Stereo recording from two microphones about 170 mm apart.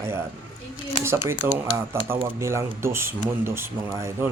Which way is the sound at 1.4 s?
15° right (ahead or behind).